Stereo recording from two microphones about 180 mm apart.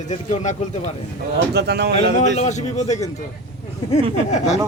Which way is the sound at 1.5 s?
65° right (ahead or behind).